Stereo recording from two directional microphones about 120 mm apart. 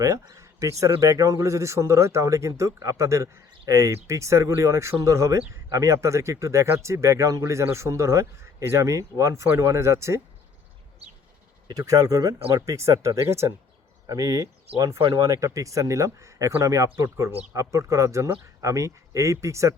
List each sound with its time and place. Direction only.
0.0 s speech: 25° right (ahead or behind)
11.7 s speech: 30° right (ahead or behind)